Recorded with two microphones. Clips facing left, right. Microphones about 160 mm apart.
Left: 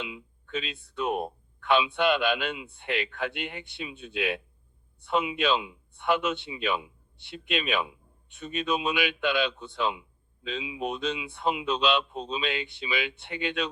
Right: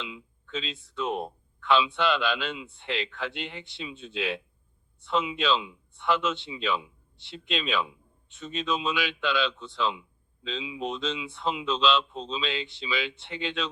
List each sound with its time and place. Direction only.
0.0 s speech: 55° left (ahead or behind)